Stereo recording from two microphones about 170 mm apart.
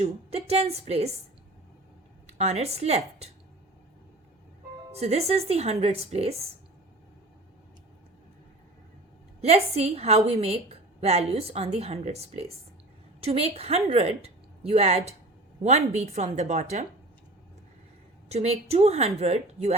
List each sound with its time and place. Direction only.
0.0 s a woman's voice: 40° right (ahead or behind)
2.2 s a woman's voice: 40° right (ahead or behind)
4.9 s a woman's voice: 35° right (ahead or behind)
9.4 s a woman's voice: 40° right (ahead or behind)
18.3 s a woman's voice: 40° right (ahead or behind)